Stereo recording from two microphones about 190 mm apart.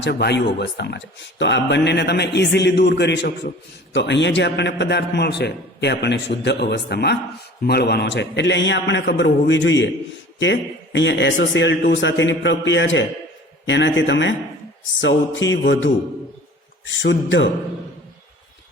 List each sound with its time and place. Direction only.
0.0 s a man's voice: 60° left (ahead or behind); by 17.5 s 75° left (ahead or behind)